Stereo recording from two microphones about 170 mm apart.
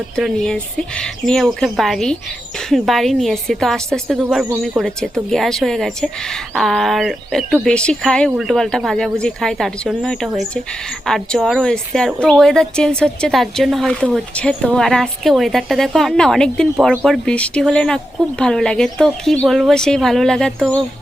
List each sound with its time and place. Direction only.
0.2 s speech: centre (ahead or behind)